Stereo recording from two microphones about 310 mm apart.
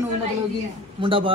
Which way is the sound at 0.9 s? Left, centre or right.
Centre.